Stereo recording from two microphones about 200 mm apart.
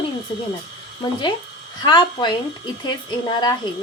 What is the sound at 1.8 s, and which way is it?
Speech, 20° left (ahead or behind).